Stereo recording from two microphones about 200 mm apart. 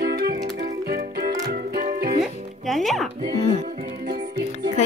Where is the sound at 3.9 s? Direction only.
55° right (ahead or behind).